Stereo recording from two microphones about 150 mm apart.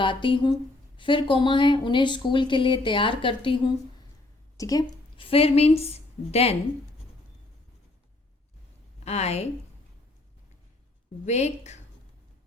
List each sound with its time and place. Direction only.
0.0 s speech: 35° left (ahead or behind)
4.5 s a woman's voice: 25° left (ahead or behind); by 6.6 s 45° left (ahead or behind)
9.0 s a woman's voice: 45° left (ahead or behind)
11.3 s a woman's voice: 50° left (ahead or behind)